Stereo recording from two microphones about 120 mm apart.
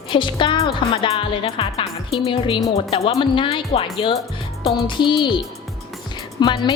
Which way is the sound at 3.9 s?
35° left (ahead or behind).